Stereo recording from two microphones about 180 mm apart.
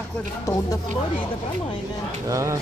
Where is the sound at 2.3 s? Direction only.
15° right (ahead or behind).